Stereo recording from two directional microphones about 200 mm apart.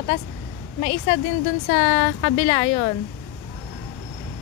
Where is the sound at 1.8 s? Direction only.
35° left (ahead or behind).